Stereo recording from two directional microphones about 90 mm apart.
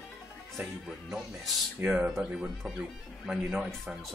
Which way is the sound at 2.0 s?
10° right (ahead or behind).